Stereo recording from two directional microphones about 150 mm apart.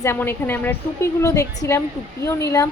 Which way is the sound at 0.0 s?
15° left (ahead or behind).